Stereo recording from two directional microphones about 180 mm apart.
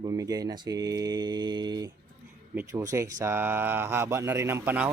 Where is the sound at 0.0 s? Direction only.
20° right (ahead or behind).